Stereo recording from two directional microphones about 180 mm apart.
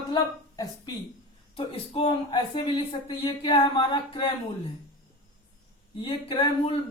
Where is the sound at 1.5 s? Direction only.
30° left (ahead or behind).